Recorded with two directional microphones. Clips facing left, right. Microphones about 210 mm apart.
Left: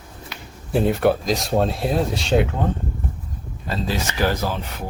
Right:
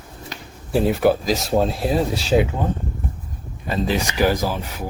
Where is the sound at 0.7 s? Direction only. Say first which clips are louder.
Right 1 dB; centre (ahead or behind).